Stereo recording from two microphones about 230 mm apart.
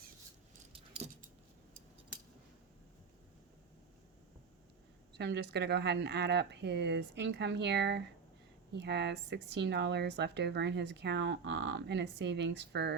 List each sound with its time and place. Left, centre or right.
5.1 s speech: right